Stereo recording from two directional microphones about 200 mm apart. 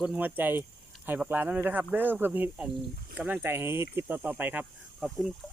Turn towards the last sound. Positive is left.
turn(degrees=0)  # may be behind; listen again after turning